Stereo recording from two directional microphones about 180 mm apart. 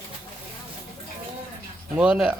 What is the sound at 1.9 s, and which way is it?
Speech, 5° right (ahead or behind).